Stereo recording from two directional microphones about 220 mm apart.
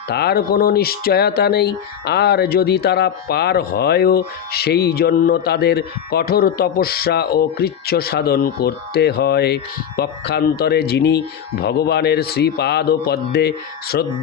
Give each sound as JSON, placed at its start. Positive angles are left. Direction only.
{"t": 0.1, "sound": "speech", "side_deg": 45}